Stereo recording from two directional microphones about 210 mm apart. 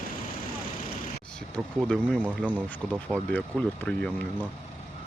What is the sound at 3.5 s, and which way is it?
Speech, 5° left (ahead or behind).